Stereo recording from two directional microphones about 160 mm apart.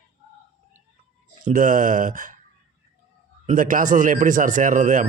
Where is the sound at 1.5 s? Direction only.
55° right (ahead or behind).